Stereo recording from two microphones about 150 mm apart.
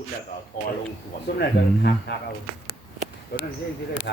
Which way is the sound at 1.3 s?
90° left.